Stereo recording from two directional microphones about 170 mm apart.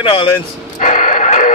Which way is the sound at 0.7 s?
45° left (ahead or behind).